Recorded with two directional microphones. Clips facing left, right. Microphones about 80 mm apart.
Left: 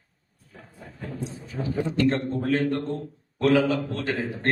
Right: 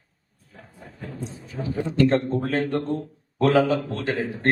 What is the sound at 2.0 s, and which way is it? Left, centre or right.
A man's voice, right.